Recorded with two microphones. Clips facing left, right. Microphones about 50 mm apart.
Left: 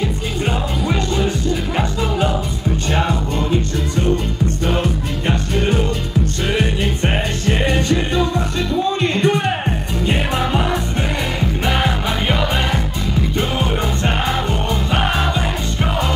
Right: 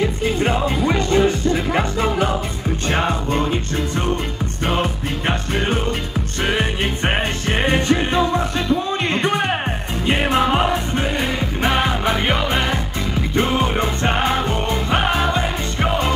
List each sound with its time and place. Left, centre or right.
0.4 s music: right
5.2 s music: right